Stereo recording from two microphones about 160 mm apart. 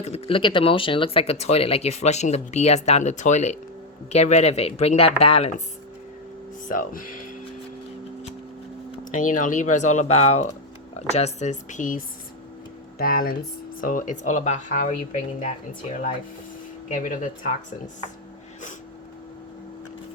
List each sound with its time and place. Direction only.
0.0 s speech: 40° left (ahead or behind)
6.7 s speech: 60° left (ahead or behind)
9.1 s speech: 55° left (ahead or behind)
13.0 s speech: 65° left (ahead or behind)
13.8 s speech: 55° left (ahead or behind)
16.9 s speech: 55° left (ahead or behind)